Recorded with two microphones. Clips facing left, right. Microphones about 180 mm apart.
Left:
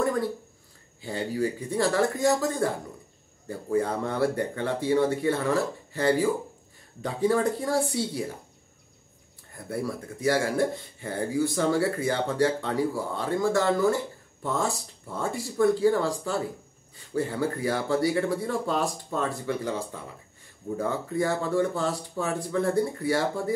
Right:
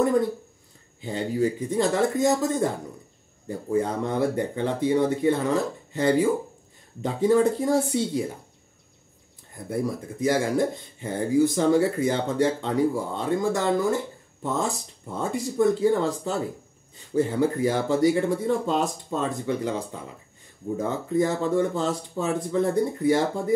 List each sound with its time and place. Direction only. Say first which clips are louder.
1.0 s speech: right 3 dB; 20° right (ahead or behind)
10.2 s speech: right 2 dB; 20° right (ahead or behind)